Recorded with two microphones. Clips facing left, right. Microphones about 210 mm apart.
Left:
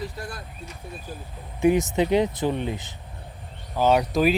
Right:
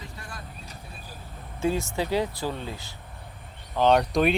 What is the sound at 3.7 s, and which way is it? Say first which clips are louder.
Speech: even; 5° left (ahead or behind).